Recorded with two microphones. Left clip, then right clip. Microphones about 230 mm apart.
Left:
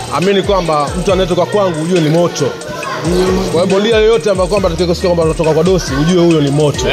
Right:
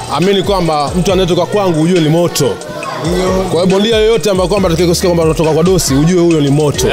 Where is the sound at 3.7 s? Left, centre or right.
Right.